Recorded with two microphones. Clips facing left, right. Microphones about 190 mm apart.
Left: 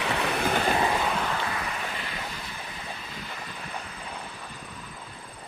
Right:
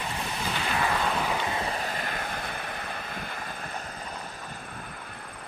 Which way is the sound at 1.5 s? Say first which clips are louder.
Right 2 dB; 30° right (ahead or behind).